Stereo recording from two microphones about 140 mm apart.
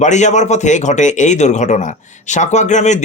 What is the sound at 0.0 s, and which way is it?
A man's voice, 60° left (ahead or behind).